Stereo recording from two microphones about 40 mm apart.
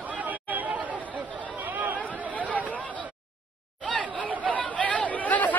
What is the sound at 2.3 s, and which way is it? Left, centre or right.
Chatter, left.